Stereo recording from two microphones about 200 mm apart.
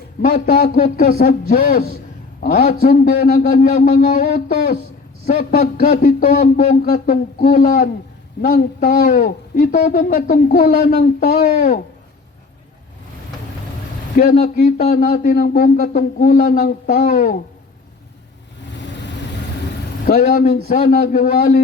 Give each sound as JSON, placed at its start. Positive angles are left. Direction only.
{"t": 0.3, "sound": "a man's voice", "side_deg": 45}
{"t": 14.2, "sound": "a man's voice", "side_deg": 40}
{"t": 20.1, "sound": "a man's voice", "side_deg": 45}